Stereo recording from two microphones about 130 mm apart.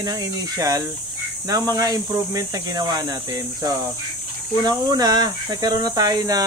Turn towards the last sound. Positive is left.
turn(degrees=-30)  # may be behind; listen again after turning